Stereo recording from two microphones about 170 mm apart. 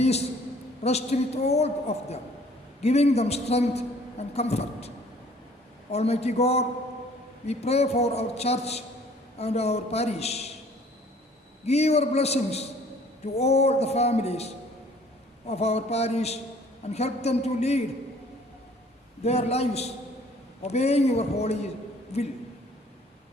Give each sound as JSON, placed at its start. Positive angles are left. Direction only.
{"t": 0.0, "sound": "a man's voice", "side_deg": 40}
{"t": 5.9, "sound": "a man's voice", "side_deg": 40}
{"t": 11.6, "sound": "a man's voice", "side_deg": 40}
{"t": 19.2, "sound": "a man's voice", "side_deg": 40}